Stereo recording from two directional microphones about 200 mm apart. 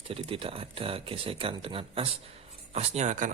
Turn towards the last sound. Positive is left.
turn(degrees=-40)  # may be behind; listen again after turning